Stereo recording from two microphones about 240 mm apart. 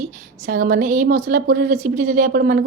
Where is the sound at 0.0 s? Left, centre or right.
Right.